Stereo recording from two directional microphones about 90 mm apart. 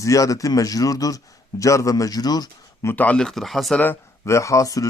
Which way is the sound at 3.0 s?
10° left (ahead or behind).